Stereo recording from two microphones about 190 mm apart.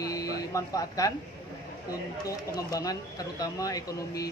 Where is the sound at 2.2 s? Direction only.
15° left (ahead or behind).